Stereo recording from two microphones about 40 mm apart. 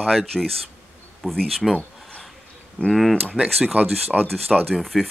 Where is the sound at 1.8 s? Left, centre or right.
Left.